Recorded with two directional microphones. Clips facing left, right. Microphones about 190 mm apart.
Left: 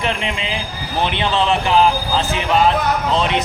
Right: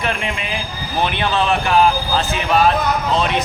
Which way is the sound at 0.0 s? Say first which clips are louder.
Left 1 dB; 20° left (ahead or behind).